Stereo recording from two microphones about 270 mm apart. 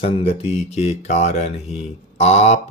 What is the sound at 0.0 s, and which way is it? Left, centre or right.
Speech, left.